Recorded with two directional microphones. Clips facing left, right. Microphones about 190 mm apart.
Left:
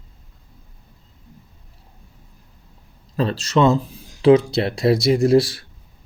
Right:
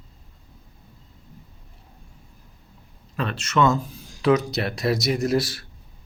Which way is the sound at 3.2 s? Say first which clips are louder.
Left 4 dB; 30° left (ahead or behind).